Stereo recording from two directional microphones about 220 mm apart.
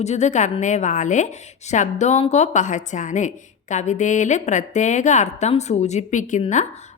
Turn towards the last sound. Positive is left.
turn(degrees=30)  # may be behind; listen again after turning